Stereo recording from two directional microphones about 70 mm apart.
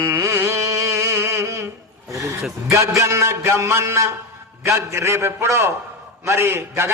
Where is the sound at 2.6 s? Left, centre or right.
Right.